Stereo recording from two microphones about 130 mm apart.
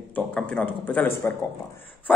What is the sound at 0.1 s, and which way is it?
A man's voice, 10° left (ahead or behind).